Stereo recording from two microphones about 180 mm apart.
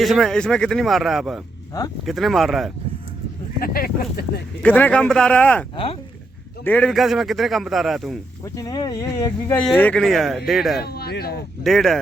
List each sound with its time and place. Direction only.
0.0 s a man's voice: centre (ahead or behind)
3.6 s speech: 55° left (ahead or behind)
4.6 s speech: 10° left (ahead or behind)
5.7 s speech: 30° left (ahead or behind)
6.7 s a man's voice: 5° left (ahead or behind)
8.5 s speech: 20° left (ahead or behind)
9.6 s a man's voice: 5° left (ahead or behind)
10.8 s speech: 60° left (ahead or behind)
11.6 s a man's voice: centre (ahead or behind)